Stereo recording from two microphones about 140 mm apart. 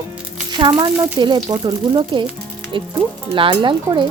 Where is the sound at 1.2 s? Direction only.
30° right (ahead or behind).